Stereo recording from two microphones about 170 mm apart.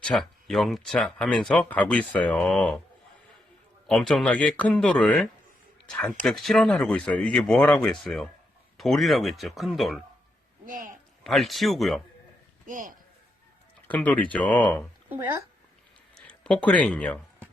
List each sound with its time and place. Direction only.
0.0 s speech: 5° left (ahead or behind)
3.8 s speech: 5° left (ahead or behind)
10.7 s speech: 50° right (ahead or behind)
11.2 s speech: centre (ahead or behind)
12.6 s speech: 50° right (ahead or behind)
13.8 s speech: 10° left (ahead or behind)
15.1 s speech: 10° right (ahead or behind)
16.1 s a sound: 5° left (ahead or behind)